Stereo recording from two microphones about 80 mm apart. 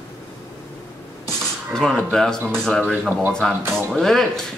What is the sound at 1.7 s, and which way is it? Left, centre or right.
Speech, centre.